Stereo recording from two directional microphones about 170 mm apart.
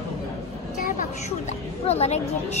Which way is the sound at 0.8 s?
50° left (ahead or behind).